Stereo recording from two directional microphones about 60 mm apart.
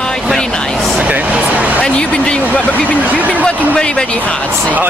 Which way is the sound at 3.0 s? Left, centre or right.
Right.